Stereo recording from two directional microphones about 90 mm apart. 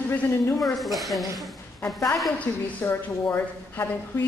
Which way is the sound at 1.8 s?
35° left (ahead or behind).